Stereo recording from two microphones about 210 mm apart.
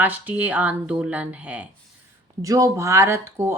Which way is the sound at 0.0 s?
10° right (ahead or behind).